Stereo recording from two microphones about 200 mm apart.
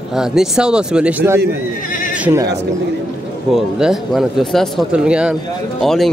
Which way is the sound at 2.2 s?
10° right (ahead or behind).